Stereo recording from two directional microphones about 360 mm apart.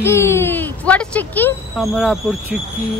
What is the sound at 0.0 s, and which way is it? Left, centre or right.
Speech, centre.